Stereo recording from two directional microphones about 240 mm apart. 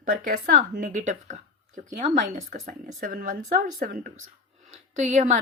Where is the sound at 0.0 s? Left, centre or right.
Right.